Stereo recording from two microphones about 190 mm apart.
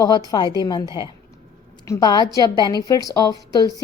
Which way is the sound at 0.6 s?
20° left (ahead or behind).